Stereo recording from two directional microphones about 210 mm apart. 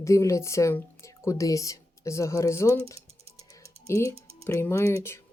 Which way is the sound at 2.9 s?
30° right (ahead or behind).